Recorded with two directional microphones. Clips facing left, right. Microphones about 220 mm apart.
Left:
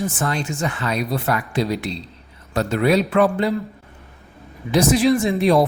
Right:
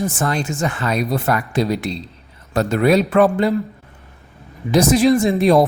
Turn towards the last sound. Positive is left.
turn(degrees=-45)  # may be behind; listen again after turning